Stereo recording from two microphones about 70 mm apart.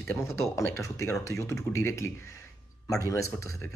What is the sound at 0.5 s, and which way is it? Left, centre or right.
Speech, left.